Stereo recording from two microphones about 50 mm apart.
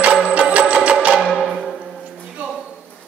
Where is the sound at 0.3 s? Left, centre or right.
Right.